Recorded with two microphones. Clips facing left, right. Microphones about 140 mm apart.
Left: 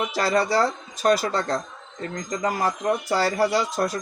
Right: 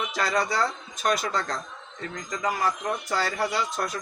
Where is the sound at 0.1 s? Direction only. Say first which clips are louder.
Left 4 dB; 35° left (ahead or behind).